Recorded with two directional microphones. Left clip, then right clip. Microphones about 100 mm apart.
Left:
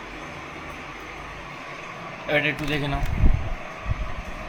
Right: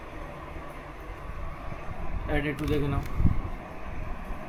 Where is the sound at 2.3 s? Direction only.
35° left (ahead or behind).